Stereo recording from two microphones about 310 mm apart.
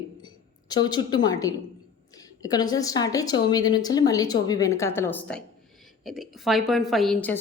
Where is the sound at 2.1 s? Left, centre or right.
Centre.